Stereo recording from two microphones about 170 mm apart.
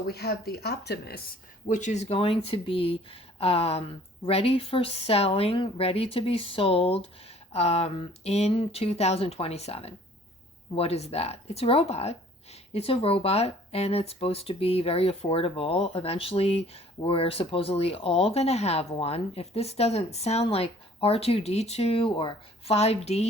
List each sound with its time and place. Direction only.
0.1 s speech: 70° left (ahead or behind)
1.7 s speech: 45° left (ahead or behind)